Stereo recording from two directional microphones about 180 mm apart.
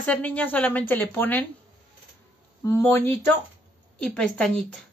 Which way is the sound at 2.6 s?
15° left (ahead or behind).